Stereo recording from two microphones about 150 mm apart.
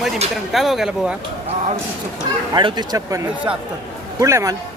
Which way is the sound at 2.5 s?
30° right (ahead or behind).